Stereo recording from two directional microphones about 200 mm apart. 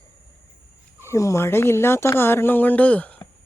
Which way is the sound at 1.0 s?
15° left (ahead or behind).